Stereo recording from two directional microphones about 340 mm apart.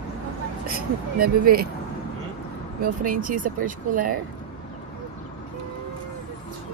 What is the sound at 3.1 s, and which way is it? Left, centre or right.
Speech, right.